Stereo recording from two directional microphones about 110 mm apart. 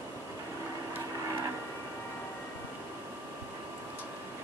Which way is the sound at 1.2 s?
30° right (ahead or behind).